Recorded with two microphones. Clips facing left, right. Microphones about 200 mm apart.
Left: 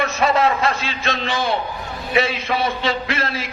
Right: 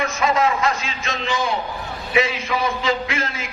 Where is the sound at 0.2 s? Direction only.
35° left (ahead or behind).